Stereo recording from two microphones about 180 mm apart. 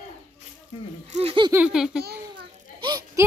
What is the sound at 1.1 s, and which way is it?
Speech, 35° right (ahead or behind).